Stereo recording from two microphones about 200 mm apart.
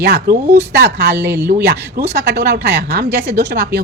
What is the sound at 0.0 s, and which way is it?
Speech, 55° right (ahead or behind).